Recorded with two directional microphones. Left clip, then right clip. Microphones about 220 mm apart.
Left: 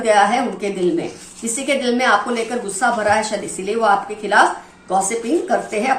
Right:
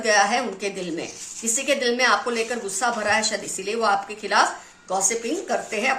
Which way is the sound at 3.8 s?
40° right (ahead or behind).